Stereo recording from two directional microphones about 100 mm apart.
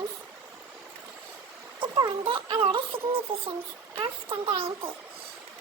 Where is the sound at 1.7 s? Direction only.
55° right (ahead or behind); by 3.5 s 70° right (ahead or behind).